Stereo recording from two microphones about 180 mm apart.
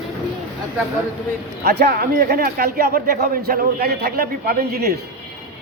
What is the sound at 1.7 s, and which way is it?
Speech, 60° right (ahead or behind).